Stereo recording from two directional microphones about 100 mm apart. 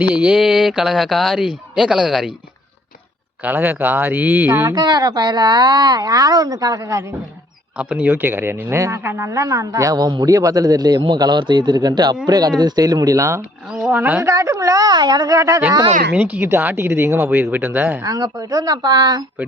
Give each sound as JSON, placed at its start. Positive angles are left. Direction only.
{"t": 0.0, "sound": "speech", "side_deg": -10}
{"t": 3.4, "sound": "speech", "side_deg": -20}
{"t": 4.7, "sound": "speech", "side_deg": -45}
{"t": 6.8, "sound": "speech", "side_deg": -30}
{"t": 7.8, "sound": "speech", "side_deg": -15}
{"t": 13.7, "sound": "speech", "side_deg": -5}
{"t": 13.9, "sound": "a woman's voice", "side_deg": -15}
{"t": 14.2, "sound": "speech", "side_deg": -30}
{"t": 16.1, "sound": "speech", "side_deg": -15}
{"t": 18.0, "sound": "speech", "side_deg": -40}